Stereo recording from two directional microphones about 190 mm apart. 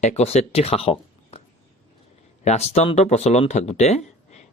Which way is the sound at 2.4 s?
35° left (ahead or behind).